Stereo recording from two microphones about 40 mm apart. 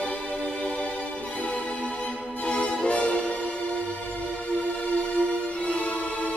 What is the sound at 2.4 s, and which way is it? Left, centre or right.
Music, left.